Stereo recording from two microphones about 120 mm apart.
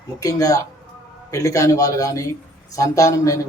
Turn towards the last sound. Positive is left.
turn(degrees=25)  # may be behind; listen again after turning